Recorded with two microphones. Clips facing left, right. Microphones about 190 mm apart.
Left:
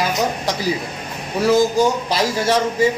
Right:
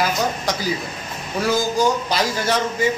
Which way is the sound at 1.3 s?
25° left (ahead or behind).